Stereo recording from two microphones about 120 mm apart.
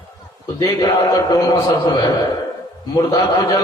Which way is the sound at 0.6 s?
30° left (ahead or behind).